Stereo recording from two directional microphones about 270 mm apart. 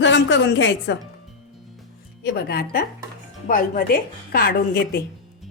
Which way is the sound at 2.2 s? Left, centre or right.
Left.